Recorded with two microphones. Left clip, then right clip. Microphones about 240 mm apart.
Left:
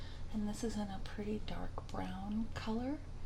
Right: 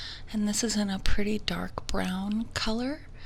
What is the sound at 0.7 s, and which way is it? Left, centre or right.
A woman's voice, right.